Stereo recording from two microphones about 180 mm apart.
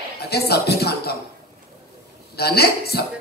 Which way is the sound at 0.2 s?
65° left (ahead or behind).